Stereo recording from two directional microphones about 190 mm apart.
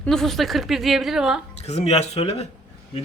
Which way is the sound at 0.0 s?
Centre (ahead or behind).